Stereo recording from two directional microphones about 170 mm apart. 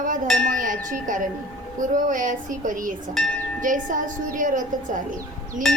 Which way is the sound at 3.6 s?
50° right (ahead or behind).